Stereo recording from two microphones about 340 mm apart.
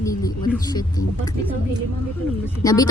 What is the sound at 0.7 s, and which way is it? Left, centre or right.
Speech, centre.